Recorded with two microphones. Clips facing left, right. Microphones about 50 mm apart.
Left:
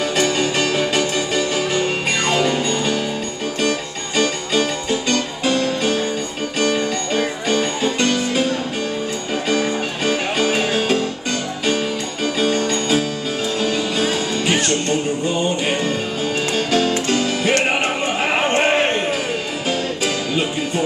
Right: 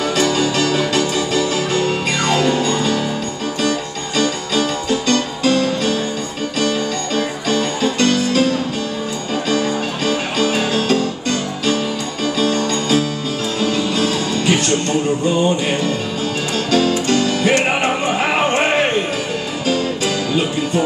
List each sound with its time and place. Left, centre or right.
0.2 s music: centre
4.2 s music: centre
9.5 s music: centre
12.4 s music: centre
16.7 s music: centre
18.0 s music: centre
18.6 s a sound: centre